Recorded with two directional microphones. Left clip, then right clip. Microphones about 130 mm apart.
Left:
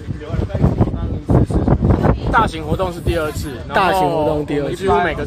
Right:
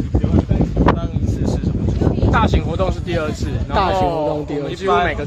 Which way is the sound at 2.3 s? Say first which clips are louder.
Left 2 dB; 5° left (ahead or behind).